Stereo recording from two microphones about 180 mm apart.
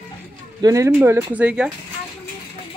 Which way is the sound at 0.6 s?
20° right (ahead or behind).